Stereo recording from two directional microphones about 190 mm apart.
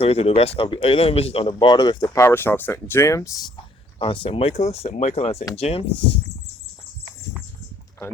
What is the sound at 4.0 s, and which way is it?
Speech, 25° left (ahead or behind).